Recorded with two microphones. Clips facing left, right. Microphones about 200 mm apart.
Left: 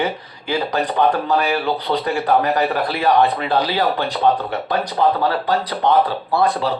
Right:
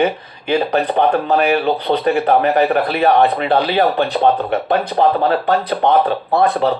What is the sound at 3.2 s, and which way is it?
Speech, 20° right (ahead or behind).